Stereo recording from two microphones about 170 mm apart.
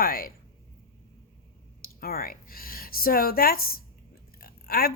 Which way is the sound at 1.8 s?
60° left (ahead or behind).